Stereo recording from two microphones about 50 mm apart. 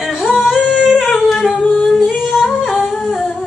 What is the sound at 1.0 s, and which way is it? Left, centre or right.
Singing, centre.